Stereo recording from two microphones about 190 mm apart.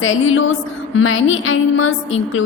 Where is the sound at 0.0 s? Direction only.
90° left.